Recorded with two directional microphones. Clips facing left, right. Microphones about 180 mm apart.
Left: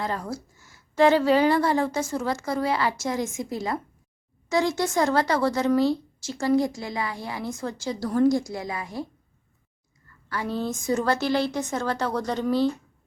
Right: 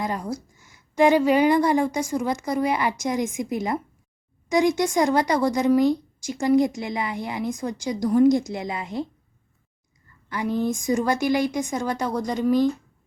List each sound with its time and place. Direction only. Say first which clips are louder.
0.0 s a woman's voice: right 2 dB; 15° right (ahead or behind)
10.2 s a woman's voice: right 4 dB; 15° right (ahead or behind)